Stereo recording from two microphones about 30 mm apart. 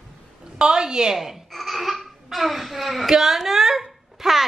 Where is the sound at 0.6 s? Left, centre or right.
Right.